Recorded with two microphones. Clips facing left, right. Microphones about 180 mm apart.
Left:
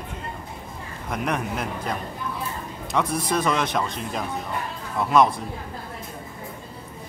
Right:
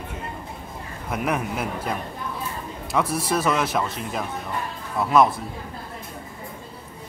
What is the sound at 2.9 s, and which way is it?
Speech, 5° right (ahead or behind).